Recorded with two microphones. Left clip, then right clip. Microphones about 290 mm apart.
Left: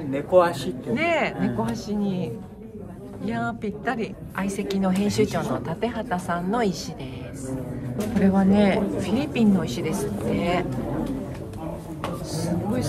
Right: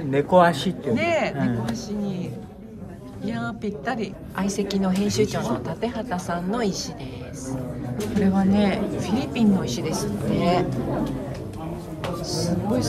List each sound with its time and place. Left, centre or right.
0.1 s a man's voice: right
0.9 s a woman's voice: centre
8.2 s a woman's voice: centre
12.3 s a sound: centre